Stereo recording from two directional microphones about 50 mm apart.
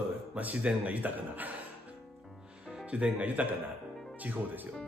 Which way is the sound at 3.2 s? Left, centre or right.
Right.